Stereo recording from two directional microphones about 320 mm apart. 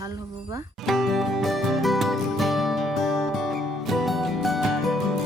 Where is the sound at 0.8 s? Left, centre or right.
Centre.